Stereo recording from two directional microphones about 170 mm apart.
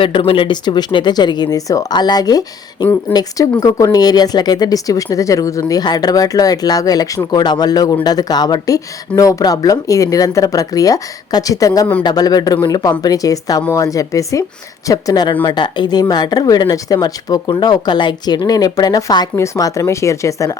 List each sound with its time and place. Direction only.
0.0 s speech: 30° left (ahead or behind)